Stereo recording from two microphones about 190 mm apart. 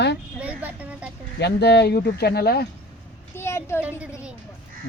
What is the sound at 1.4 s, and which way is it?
Speech, 60° left (ahead or behind).